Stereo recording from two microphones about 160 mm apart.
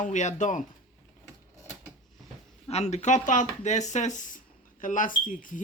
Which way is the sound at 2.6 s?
45° left (ahead or behind).